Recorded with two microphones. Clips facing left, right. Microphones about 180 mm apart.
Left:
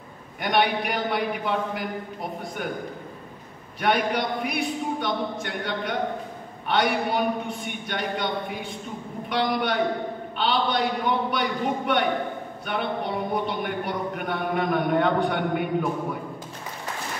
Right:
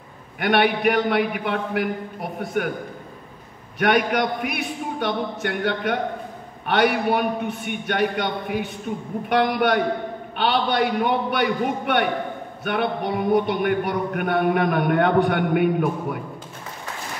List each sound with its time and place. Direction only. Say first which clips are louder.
0.4 s a man's voice: right 4 dB; 60° right (ahead or behind)
3.8 s a man's voice: right 4 dB; 60° right (ahead or behind)